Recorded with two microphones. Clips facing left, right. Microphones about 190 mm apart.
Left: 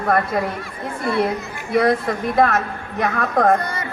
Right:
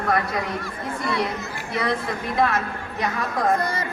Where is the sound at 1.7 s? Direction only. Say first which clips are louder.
Left 8 dB; 55° left (ahead or behind).